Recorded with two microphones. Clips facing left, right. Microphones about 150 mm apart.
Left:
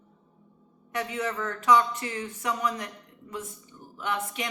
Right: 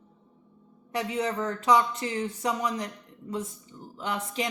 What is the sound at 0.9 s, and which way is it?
Speech, 30° right (ahead or behind).